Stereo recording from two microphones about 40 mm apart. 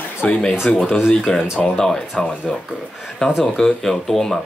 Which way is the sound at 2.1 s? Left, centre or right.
Left.